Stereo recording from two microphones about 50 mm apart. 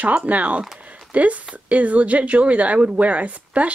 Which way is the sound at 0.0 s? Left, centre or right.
Right.